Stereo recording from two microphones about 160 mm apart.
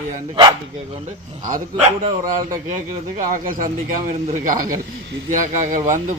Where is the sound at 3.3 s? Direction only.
55° right (ahead or behind).